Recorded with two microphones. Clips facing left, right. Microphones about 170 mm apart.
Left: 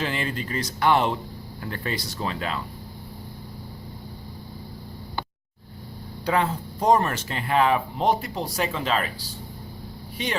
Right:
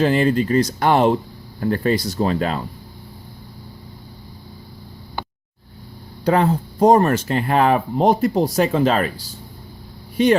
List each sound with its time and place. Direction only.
0.0 s speech: 40° right (ahead or behind)
6.2 s speech: 40° right (ahead or behind)